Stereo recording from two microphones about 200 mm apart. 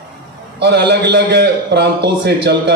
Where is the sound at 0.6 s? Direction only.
55° right (ahead or behind).